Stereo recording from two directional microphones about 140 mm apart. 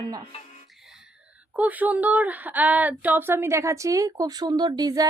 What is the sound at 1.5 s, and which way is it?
A woman's voice, 10° right (ahead or behind).